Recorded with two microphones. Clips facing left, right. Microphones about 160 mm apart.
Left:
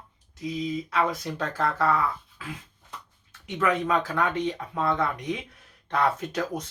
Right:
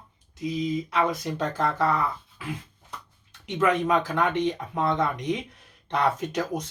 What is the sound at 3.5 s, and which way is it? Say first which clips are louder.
Speech: right 2 dB; 20° right (ahead or behind).